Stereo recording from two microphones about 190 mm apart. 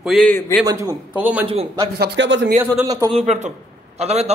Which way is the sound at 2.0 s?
75° right (ahead or behind).